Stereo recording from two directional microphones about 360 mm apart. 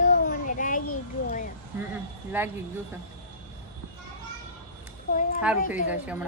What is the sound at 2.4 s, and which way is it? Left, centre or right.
Speech, centre.